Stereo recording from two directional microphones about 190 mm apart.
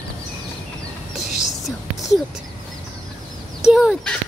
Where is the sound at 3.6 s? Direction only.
5° right (ahead or behind).